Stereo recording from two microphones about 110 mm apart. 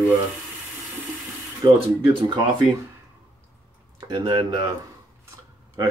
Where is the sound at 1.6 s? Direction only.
40° right (ahead or behind).